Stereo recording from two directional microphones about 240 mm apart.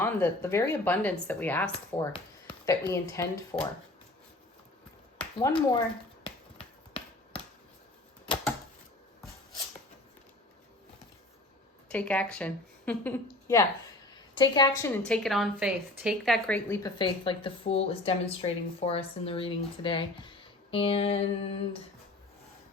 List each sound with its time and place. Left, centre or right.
0.0 s speech: centre
2.1 s a woman's voice: centre
6.2 s a sound: left
11.9 s a woman's voice: centre; by 21.8 s left